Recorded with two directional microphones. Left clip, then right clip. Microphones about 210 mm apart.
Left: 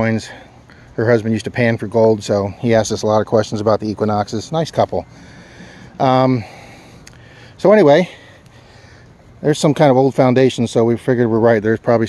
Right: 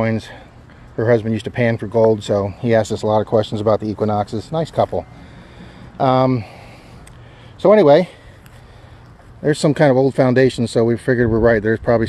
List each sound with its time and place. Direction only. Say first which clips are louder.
0.0 s speech: left 2 dB; 15° left (ahead or behind)
5.6 s a sound: left 1 dB; 10° left (ahead or behind)
7.6 s speech: even; 20° left (ahead or behind)
9.4 s speech: left 2 dB; 10° left (ahead or behind)